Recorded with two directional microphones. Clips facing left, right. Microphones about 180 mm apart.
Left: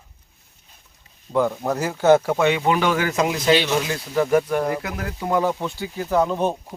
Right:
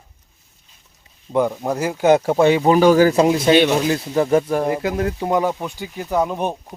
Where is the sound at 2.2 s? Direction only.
30° right (ahead or behind).